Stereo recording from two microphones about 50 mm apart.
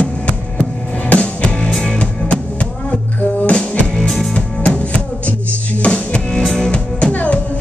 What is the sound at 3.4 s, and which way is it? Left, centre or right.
Music, left.